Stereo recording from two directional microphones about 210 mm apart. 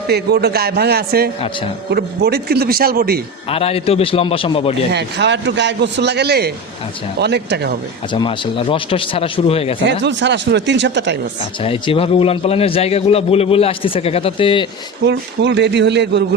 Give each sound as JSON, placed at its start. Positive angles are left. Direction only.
{"t": 0.1, "sound": "speech", "side_deg": -50}
{"t": 3.5, "sound": "a man's voice", "side_deg": 25}
{"t": 4.9, "sound": "speech", "side_deg": -55}
{"t": 8.1, "sound": "a man's voice", "side_deg": 25}
{"t": 9.8, "sound": "speech", "side_deg": -55}
{"t": 11.3, "sound": "a man's voice", "side_deg": 25}
{"t": 15.0, "sound": "speech", "side_deg": -60}